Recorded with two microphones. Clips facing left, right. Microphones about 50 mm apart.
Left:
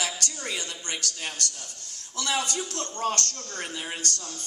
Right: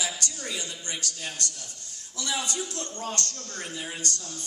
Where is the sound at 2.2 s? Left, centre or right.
Left.